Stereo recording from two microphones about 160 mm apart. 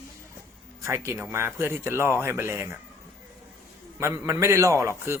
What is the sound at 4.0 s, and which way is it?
Speech, 15° right (ahead or behind).